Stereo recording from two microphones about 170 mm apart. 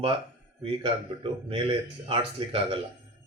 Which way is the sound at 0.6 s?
35° right (ahead or behind).